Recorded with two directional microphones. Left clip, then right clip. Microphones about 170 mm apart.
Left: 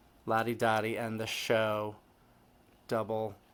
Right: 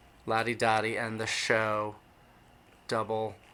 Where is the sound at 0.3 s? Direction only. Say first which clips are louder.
Right 2 dB; 50° left (ahead or behind).